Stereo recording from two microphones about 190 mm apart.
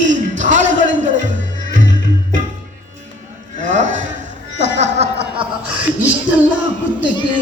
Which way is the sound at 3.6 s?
40° right (ahead or behind).